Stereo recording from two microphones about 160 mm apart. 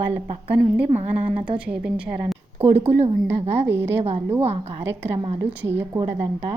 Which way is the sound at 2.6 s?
30° right (ahead or behind).